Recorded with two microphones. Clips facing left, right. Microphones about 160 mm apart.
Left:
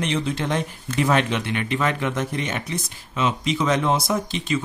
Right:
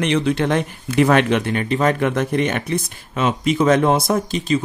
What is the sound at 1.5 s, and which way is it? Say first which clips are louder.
A man's voice: right 5 dB; 40° right (ahead or behind).